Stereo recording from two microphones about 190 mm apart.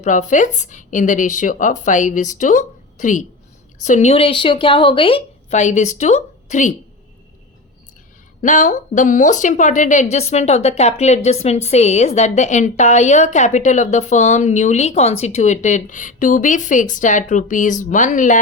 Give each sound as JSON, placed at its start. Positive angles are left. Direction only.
{"t": 0.0, "sound": "a woman's voice", "side_deg": 40}
{"t": 8.4, "sound": "a woman's voice", "side_deg": 40}